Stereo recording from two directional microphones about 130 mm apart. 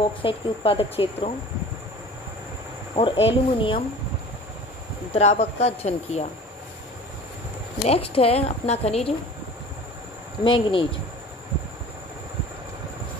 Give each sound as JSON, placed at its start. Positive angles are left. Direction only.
{"t": 0.2, "sound": "a woman's voice", "side_deg": 45}
{"t": 3.0, "sound": "speech", "side_deg": 40}
{"t": 5.1, "sound": "speech", "side_deg": 55}
{"t": 7.8, "sound": "a woman's voice", "side_deg": 50}
{"t": 10.4, "sound": "speech", "side_deg": 40}